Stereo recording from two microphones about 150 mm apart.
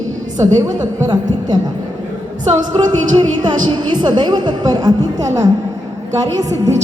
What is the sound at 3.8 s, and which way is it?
A woman's voice, 30° right (ahead or behind).